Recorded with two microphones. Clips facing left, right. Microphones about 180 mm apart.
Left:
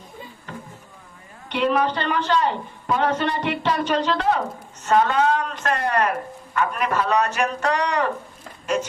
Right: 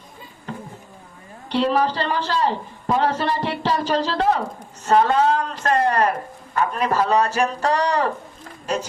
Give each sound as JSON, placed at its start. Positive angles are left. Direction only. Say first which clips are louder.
{"t": 1.5, "sound": "a man's voice", "louder": "right 1 dB", "side_deg": -35}